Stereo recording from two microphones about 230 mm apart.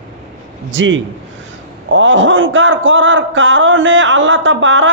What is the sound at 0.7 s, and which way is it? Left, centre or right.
A man's voice, right.